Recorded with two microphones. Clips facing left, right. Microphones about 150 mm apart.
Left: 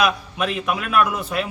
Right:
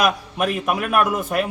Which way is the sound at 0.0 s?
50° right (ahead or behind).